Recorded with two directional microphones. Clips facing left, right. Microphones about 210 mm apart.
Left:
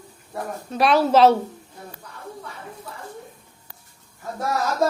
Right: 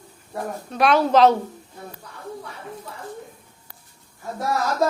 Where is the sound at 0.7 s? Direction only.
Centre (ahead or behind).